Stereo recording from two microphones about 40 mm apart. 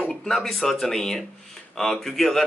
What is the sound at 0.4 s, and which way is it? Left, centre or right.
Speech, centre.